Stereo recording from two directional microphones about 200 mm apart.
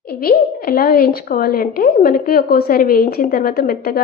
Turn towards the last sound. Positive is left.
turn(degrees=50)  # may be behind; listen again after turning